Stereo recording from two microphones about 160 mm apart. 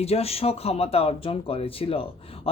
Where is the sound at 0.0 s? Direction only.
40° left (ahead or behind).